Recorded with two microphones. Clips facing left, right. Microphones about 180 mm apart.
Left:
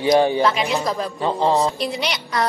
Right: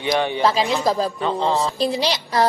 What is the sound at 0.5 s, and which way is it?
A woman's voice, 35° right (ahead or behind).